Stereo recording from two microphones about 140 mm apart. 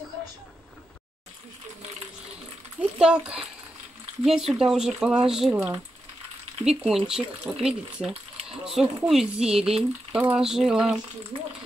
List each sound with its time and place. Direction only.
2.8 s speech: 5° right (ahead or behind)
5.5 s speech: 15° right (ahead or behind)
6.6 s speech: 5° right (ahead or behind)
11.3 s speech: 40° right (ahead or behind)